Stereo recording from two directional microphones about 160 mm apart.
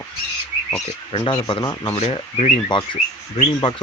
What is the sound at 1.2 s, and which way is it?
Speech, 30° left (ahead or behind).